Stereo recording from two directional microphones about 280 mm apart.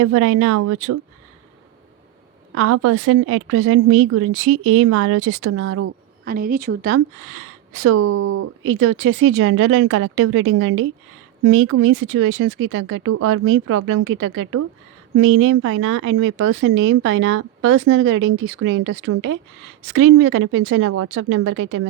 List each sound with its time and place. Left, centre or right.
0.0 s speech: right
2.6 s speech: right
6.2 s speech: right
7.3 s speech: right
8.6 s speech: right